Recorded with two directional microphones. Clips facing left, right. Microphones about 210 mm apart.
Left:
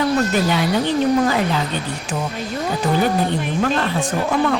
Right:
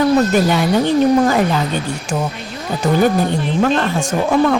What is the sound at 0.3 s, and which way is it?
Speech, 45° right (ahead or behind).